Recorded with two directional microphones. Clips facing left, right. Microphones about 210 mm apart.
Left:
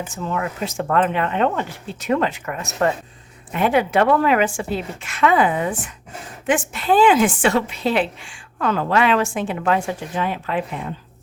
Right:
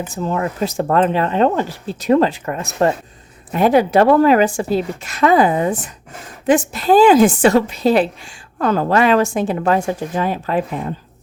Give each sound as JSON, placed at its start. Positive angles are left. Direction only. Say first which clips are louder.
{"t": 0.0, "sound": "speech", "louder": "right 4 dB", "side_deg": -35}